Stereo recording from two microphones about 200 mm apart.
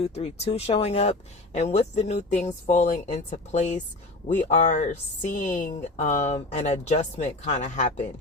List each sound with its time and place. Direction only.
0.0 s speech: 30° left (ahead or behind)